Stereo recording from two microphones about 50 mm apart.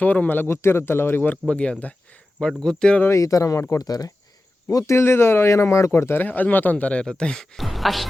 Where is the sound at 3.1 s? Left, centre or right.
Left.